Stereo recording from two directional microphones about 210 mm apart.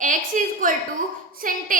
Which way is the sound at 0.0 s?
35° right (ahead or behind).